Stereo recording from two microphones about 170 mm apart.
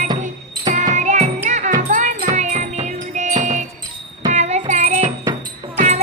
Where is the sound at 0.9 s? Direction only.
45° right (ahead or behind).